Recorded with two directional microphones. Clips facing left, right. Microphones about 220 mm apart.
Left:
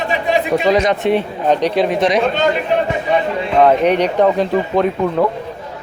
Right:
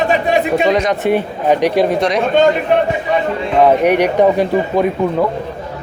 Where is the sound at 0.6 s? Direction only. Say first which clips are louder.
Even; centre (ahead or behind).